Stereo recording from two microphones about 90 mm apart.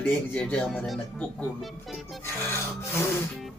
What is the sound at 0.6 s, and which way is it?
Speech, centre (ahead or behind).